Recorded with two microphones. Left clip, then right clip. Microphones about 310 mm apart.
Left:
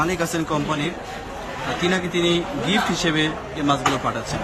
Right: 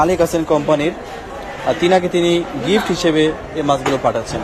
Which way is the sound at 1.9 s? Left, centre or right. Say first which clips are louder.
Right 7 dB; centre.